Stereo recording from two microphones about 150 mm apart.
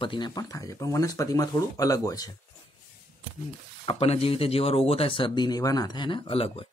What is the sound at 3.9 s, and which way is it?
Speech, 40° left (ahead or behind).